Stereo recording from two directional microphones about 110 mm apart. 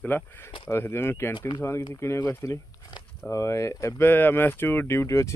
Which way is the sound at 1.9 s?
25° left (ahead or behind).